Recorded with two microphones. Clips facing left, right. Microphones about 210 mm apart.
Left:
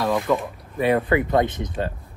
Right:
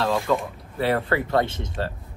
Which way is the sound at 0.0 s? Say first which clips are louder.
Left 1 dB; 15° left (ahead or behind).